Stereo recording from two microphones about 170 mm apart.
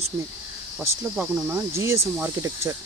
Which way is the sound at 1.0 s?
10° right (ahead or behind).